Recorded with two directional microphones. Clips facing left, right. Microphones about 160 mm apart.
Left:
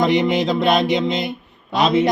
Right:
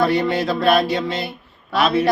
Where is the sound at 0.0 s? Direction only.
20° left (ahead or behind).